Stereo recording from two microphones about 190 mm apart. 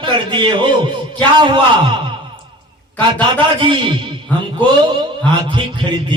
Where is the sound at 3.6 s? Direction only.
25° right (ahead or behind).